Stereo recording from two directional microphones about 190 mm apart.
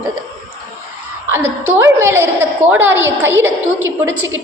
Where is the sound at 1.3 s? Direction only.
10° right (ahead or behind).